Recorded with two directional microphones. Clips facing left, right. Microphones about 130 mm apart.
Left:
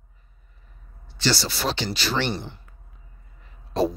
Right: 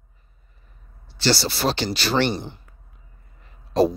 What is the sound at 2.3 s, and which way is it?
Speech, 15° right (ahead or behind).